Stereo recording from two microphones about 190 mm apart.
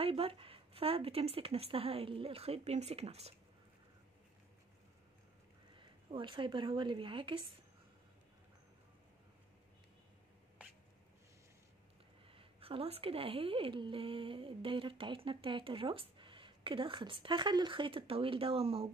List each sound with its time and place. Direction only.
0.0 s speech: 30° right (ahead or behind)
5.8 s a woman's voice: 25° right (ahead or behind)
10.6 s rodents: 5° right (ahead or behind)
12.3 s a woman's voice: 30° right (ahead or behind)